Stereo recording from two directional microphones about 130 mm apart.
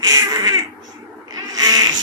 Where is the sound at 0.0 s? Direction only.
30° right (ahead or behind).